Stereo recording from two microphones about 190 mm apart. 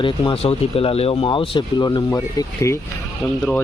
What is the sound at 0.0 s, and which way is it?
Speech, 30° left (ahead or behind).